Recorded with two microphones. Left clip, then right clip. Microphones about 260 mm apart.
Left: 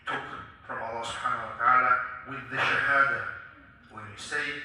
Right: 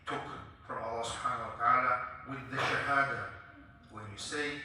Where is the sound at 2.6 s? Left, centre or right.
Right.